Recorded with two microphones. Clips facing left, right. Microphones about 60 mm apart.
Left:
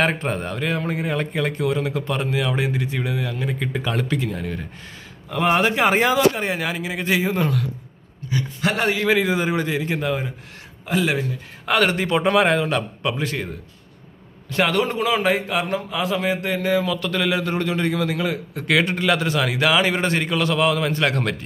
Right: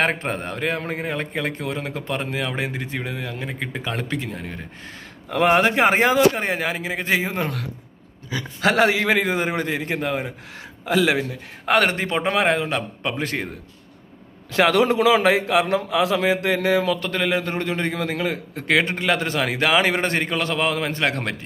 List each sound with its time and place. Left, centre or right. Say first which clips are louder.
0.1 s a man's voice: left 1 dB; right
0.9 s a man's voice: left 2 dB; right
5.3 s a man's voice: right 2 dB; right
5.8 s a man's voice: right 1 dB; right
8.5 s a man's voice: right 5 dB; right
9.0 s a man's voice: left 1 dB; right
10.9 s speech: right 2 dB; right
11.6 s a man's voice: even; right
13.2 s a man's voice: even; right
14.6 s a man's voice: right 3 dB; right
17.0 s a man's voice: left 1 dB; right